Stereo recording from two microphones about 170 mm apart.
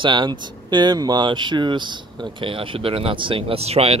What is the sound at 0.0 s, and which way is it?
Speech, 25° right (ahead or behind).